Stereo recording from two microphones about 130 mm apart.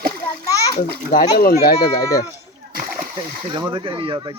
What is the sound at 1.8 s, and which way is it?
Speech, 25° left (ahead or behind).